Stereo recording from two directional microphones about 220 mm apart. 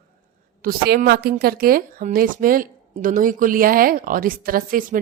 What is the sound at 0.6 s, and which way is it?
A woman's voice, 40° right (ahead or behind).